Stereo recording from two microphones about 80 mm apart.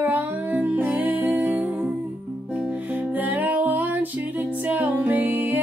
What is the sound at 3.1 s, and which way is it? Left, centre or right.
Music, right.